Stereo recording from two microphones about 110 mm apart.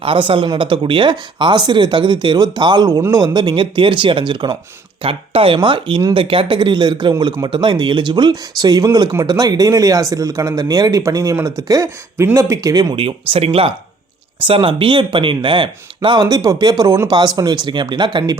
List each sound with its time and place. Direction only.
0.0 s speech: 50° right (ahead or behind); by 13.0 s 35° right (ahead or behind)
13.0 s speech: 55° right (ahead or behind)